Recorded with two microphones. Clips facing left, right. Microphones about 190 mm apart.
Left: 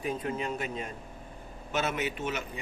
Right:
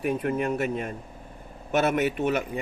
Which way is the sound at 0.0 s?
60° right (ahead or behind).